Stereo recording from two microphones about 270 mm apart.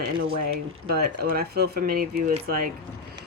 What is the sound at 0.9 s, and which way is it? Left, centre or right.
Speech, right.